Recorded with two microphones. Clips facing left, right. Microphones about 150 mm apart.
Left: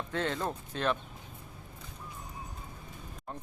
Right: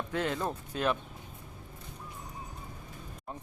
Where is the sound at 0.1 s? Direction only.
10° right (ahead or behind).